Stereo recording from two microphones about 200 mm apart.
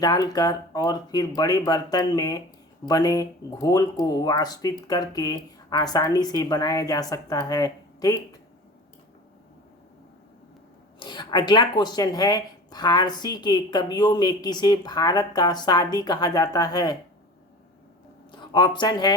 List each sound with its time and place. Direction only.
0.0 s speech: 20° left (ahead or behind)
11.0 s speech: 25° left (ahead or behind)
18.3 s speech: 20° left (ahead or behind)